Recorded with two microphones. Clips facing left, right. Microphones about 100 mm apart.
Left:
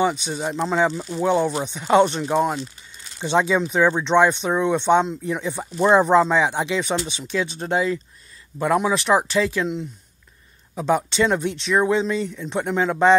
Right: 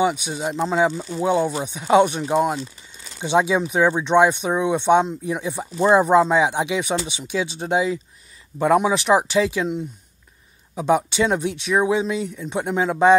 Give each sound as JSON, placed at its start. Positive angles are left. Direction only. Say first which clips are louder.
{"t": 0.0, "sound": "speech", "louder": "right 1 dB", "side_deg": -10}
{"t": 10.8, "sound": "speech", "louder": "right 1 dB", "side_deg": -15}